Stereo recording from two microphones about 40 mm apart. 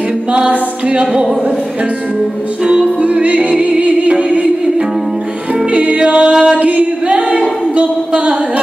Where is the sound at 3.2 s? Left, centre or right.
Right.